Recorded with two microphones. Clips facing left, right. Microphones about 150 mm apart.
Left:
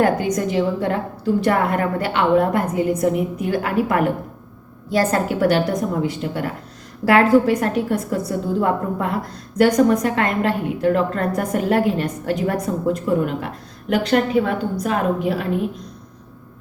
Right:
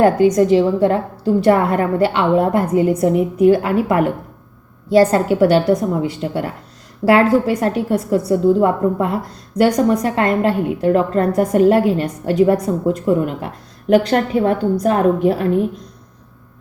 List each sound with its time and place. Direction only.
0.0 s a woman's voice: 30° right (ahead or behind)